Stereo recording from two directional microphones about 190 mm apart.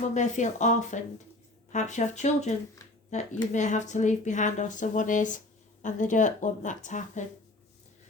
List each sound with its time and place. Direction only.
0.1 s speech: 40° left (ahead or behind)